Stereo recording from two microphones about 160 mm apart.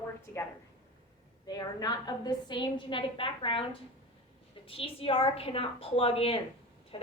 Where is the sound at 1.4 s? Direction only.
25° left (ahead or behind).